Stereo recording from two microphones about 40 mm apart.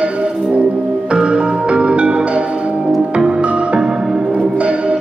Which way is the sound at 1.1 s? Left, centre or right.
Right.